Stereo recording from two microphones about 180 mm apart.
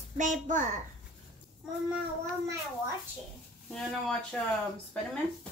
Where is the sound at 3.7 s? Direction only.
5° left (ahead or behind).